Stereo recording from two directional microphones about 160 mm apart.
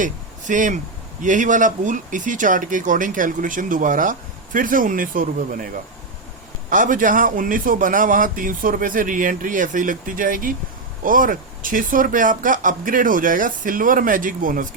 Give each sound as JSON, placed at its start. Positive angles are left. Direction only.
{"t": 0.0, "sound": "speech", "side_deg": -55}
{"t": 6.7, "sound": "speech", "side_deg": -55}